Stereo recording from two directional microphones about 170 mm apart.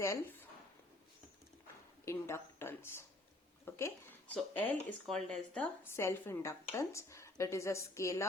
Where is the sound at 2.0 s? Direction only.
15° left (ahead or behind).